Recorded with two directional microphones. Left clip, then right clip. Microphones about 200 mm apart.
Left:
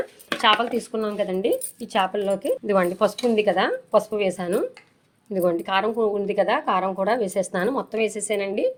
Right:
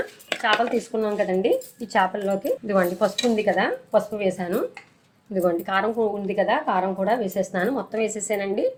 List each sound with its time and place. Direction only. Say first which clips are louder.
0.8 s speech: right 2 dB; 45° left (ahead or behind)